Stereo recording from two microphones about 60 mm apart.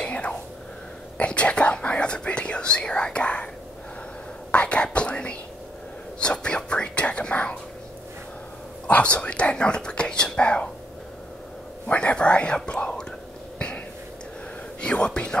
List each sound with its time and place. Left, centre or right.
0.0 s whispering: centre
4.5 s whispering: centre
8.8 s whispering: centre
11.9 s whispering: centre
14.8 s a sound: centre